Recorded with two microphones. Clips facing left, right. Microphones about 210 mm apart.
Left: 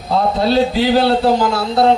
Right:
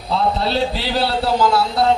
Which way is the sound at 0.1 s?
50° left (ahead or behind).